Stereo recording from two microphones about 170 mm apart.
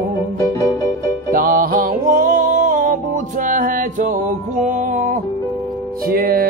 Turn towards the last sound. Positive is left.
turn(degrees=-60)  # may be behind; listen again after turning